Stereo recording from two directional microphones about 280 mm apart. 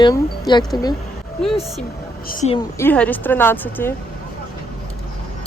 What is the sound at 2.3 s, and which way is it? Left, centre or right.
Speech, left.